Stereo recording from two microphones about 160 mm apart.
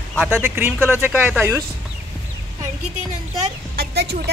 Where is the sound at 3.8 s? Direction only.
90° right.